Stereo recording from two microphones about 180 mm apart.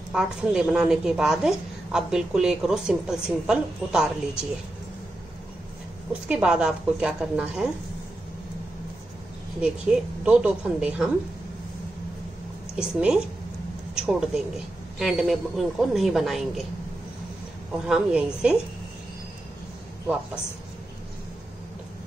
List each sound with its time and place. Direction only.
0.1 s a woman's voice: 5° right (ahead or behind)
6.2 s a woman's voice: 5° right (ahead or behind)
9.6 s a woman's voice: 5° right (ahead or behind)
12.7 s a woman's voice: 5° right (ahead or behind)
17.8 s a woman's voice: 5° right (ahead or behind)